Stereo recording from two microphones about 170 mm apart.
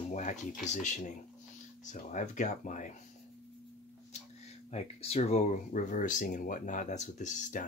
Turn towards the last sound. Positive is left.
turn(degrees=45)  # may be behind; listen again after turning